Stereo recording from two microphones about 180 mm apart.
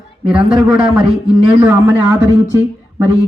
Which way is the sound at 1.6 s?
15° right (ahead or behind).